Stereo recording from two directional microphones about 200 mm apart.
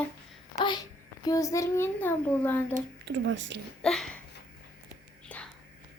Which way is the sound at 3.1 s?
65° right (ahead or behind).